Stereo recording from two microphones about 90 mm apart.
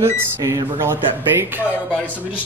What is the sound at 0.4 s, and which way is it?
Speech, 35° right (ahead or behind).